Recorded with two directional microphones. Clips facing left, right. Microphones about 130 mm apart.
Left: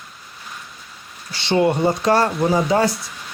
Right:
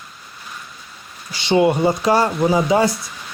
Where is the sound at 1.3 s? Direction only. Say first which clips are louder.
Right 2 dB; 15° right (ahead or behind).